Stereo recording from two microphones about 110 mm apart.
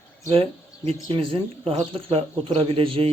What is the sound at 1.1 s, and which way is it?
Speech, 55° right (ahead or behind).